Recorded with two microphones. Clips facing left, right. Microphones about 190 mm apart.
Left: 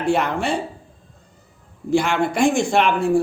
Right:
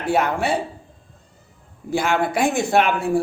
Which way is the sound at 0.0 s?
5° right (ahead or behind).